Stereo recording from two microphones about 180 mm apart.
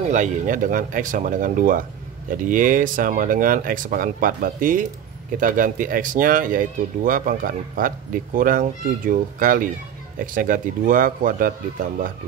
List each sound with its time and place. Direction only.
0.1 s speech: 45° right (ahead or behind)